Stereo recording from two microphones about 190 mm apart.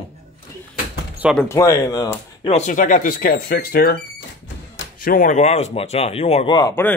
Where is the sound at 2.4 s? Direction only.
35° left (ahead or behind); by 3.9 s 55° left (ahead or behind).